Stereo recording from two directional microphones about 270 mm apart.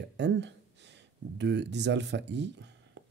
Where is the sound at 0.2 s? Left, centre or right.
Right.